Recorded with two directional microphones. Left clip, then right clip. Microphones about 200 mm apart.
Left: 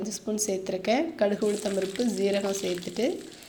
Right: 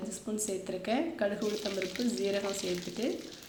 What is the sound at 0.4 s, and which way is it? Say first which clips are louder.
A woman's voice: left 8 dB; 30° left (ahead or behind).